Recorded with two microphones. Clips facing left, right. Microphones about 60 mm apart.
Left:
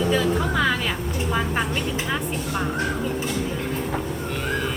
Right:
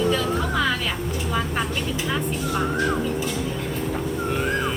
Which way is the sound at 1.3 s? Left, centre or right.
Centre.